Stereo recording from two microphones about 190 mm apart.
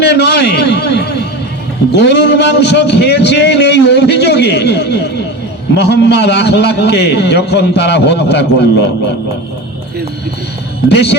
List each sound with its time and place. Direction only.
0.0 s a man's voice: 60° left (ahead or behind)
10.8 s a man's voice: 60° left (ahead or behind)